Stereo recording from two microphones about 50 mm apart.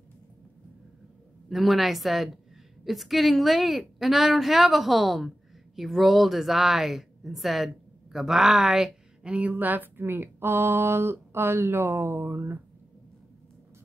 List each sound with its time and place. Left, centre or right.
1.5 s a woman's voice: centre
9.3 s speech: right